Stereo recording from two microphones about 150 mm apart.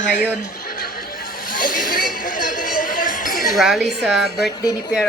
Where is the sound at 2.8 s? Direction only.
65° left (ahead or behind).